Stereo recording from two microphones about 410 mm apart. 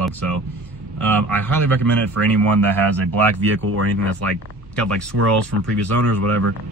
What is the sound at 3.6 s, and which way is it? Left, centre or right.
Speech, right.